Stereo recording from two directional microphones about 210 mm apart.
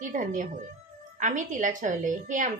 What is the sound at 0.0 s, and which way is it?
A woman's voice, 35° right (ahead or behind).